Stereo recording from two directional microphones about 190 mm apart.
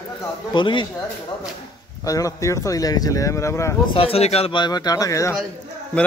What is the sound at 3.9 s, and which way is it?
Speech, 30° left (ahead or behind).